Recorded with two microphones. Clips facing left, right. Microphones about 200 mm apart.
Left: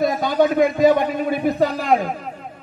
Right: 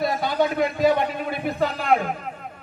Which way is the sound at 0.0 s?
45° left (ahead or behind).